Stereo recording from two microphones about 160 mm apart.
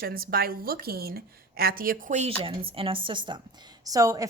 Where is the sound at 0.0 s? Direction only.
65° right (ahead or behind).